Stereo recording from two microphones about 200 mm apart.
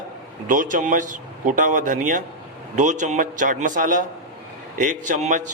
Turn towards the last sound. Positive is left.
turn(degrees=-40)  # may be behind; listen again after turning